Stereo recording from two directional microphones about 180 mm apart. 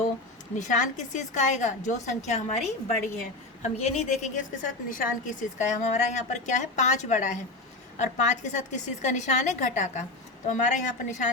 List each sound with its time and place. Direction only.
0.6 s a woman's voice: 45° left (ahead or behind)